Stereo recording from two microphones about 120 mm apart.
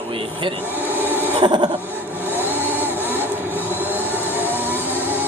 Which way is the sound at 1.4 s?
40° right (ahead or behind).